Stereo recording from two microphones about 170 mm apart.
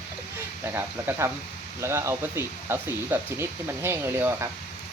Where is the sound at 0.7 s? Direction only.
10° right (ahead or behind).